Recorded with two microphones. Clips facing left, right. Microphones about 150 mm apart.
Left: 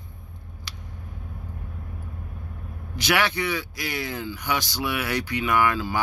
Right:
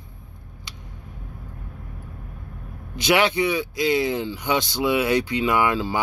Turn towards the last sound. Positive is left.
turn(degrees=-25)  # may be behind; listen again after turning